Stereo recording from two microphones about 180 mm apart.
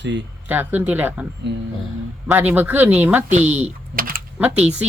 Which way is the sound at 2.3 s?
10° right (ahead or behind).